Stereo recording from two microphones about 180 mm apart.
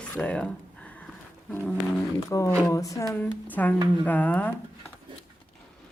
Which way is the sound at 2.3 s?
15° left (ahead or behind).